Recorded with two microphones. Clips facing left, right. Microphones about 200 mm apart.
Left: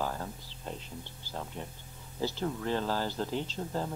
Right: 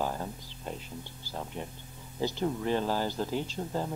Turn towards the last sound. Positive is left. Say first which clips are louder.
# right 1 dB
turn(degrees=-10)  # may be behind; listen again after turning